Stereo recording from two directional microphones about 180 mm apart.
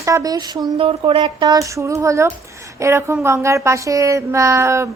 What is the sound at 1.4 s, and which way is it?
A woman's voice, 20° right (ahead or behind).